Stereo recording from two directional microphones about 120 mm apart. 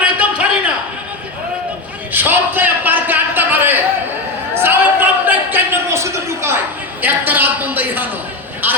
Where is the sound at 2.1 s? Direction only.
15° right (ahead or behind).